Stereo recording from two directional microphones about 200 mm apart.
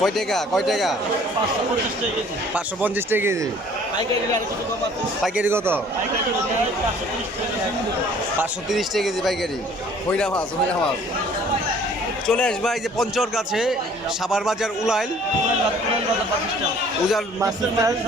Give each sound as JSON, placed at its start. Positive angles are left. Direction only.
{"t": 0.0, "sound": "a man's voice", "side_deg": 0}
{"t": 2.8, "sound": "a man's voice", "side_deg": -10}
{"t": 5.2, "sound": "a man's voice", "side_deg": -10}
{"t": 8.4, "sound": "a man's voice", "side_deg": 0}
{"t": 12.3, "sound": "a man's voice", "side_deg": 5}
{"t": 17.4, "sound": "a man's voice", "side_deg": -15}